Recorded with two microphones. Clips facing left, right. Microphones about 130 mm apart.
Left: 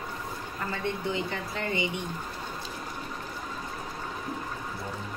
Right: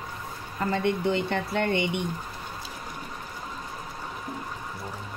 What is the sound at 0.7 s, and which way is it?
Speech, 75° right (ahead or behind).